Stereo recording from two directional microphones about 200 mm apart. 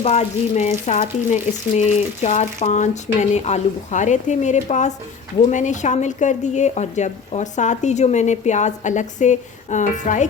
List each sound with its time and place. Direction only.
0.0 s speech: 35° left (ahead or behind)